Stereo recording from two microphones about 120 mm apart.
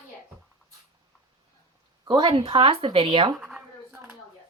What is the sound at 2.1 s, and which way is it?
Speech, 45° right (ahead or behind).